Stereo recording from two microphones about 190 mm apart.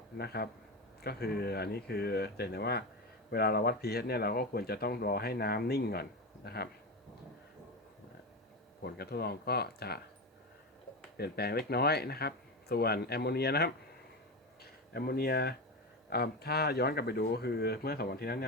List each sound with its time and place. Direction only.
1.0 s speech: 55° left (ahead or behind)
8.8 s speech: 55° left (ahead or behind)
11.2 s speech: 55° left (ahead or behind)